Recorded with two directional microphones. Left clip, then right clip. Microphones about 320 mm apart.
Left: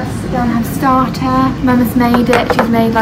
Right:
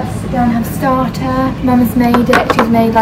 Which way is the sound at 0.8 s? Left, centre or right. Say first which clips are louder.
Left 2 dB; centre.